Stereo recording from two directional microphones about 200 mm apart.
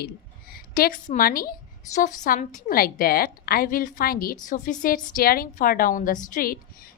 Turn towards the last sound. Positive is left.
turn(degrees=45)  # may be behind; listen again after turning